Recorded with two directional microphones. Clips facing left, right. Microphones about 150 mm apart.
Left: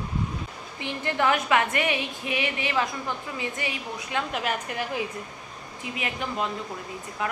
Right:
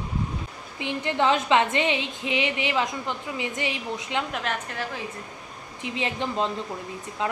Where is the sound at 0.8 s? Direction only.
20° right (ahead or behind).